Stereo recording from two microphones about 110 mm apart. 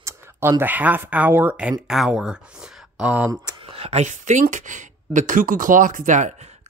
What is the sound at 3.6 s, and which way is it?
Speech, 60° right (ahead or behind).